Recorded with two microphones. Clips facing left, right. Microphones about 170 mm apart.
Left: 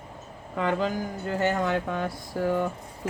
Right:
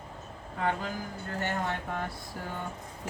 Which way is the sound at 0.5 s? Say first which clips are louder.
Left 6 dB; 90° left.